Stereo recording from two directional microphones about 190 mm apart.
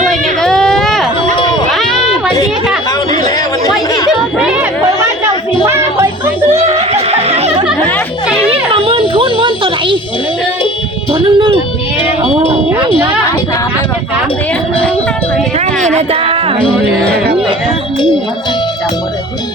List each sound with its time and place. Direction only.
0.0 s a sound: centre (ahead or behind)
5.6 s music: 15° right (ahead or behind)
6.5 s snicker: 35° right (ahead or behind)
8.4 s a sound: 30° right (ahead or behind)
11.1 s music: 25° right (ahead or behind)
16.0 s speech: 30° right (ahead or behind)